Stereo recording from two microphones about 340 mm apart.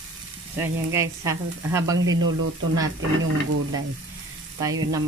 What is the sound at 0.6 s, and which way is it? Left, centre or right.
Sizzle, centre.